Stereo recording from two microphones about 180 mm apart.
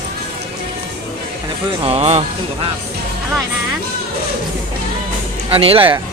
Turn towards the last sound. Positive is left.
turn(degrees=-30)  # may be behind; listen again after turning